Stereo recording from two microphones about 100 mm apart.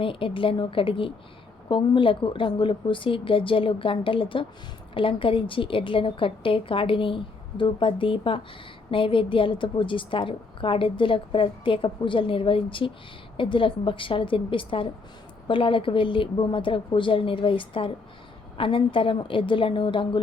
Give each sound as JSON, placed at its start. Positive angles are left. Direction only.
{"t": 0.0, "sound": "a woman's voice", "side_deg": 60}